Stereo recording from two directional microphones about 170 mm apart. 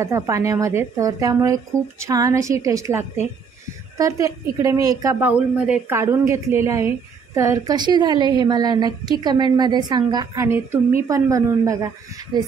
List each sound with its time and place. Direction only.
0.0 s speech: 15° right (ahead or behind)
5.2 s speech: 10° right (ahead or behind); by 12.5 s 25° right (ahead or behind)